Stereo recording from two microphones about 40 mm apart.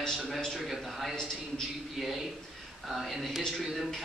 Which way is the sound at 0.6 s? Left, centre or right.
Centre.